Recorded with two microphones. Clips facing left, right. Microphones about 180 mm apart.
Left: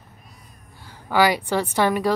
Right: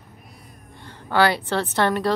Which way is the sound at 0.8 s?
10° left (ahead or behind).